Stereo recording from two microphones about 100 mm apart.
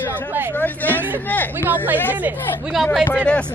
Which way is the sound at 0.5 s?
20° left (ahead or behind).